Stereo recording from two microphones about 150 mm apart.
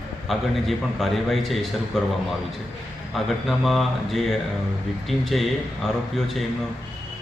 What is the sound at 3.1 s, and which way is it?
A man's voice, centre (ahead or behind).